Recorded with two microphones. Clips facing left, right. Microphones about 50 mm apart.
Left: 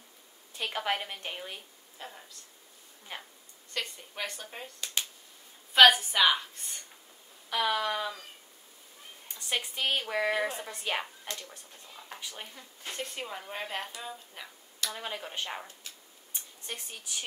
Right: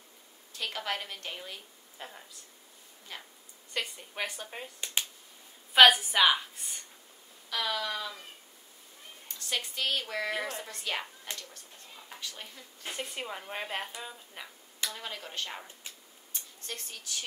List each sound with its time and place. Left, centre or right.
0.5 s a woman's voice: centre
2.0 s speech: centre
3.1 s speech: left
3.7 s a woman's voice: centre
4.7 s speech: right
5.7 s a woman's voice: centre
7.4 s speech: centre
9.3 s a woman's voice: centre
12.8 s speech: centre
14.9 s a woman's voice: centre
16.3 s a sound: centre